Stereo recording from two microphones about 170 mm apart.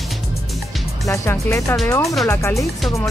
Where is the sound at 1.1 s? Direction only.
15° left (ahead or behind).